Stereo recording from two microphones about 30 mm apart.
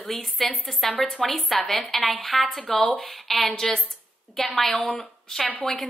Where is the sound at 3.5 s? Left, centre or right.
Centre.